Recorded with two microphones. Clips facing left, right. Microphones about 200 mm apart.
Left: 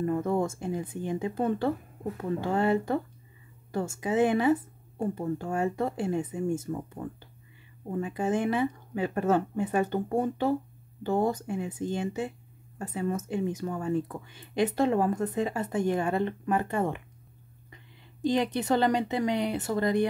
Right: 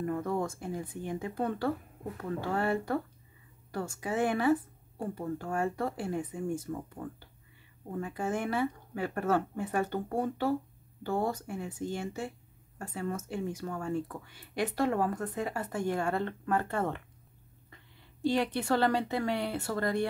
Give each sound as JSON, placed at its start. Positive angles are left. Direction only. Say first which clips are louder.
{"t": 0.0, "sound": "speech", "louder": "left 5 dB", "side_deg": 25}
{"t": 18.2, "sound": "speech", "louder": "left 3 dB", "side_deg": 20}